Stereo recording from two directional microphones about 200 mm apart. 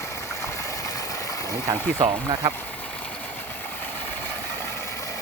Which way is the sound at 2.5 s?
5° left (ahead or behind).